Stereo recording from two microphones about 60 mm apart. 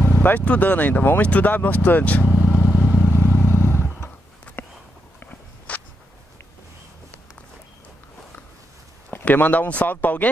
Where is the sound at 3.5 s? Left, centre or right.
Left.